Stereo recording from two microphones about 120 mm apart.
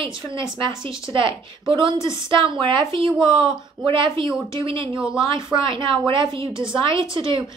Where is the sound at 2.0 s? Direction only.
45° right (ahead or behind).